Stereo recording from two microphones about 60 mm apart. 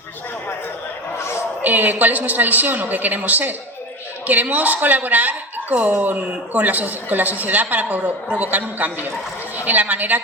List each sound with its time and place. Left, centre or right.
1.6 s speech: right